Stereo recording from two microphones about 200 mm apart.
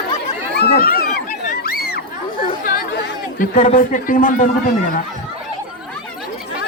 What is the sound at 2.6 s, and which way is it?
Chatter, 45° left (ahead or behind).